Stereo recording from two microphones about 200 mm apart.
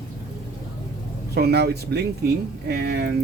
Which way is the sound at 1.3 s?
55° right (ahead or behind).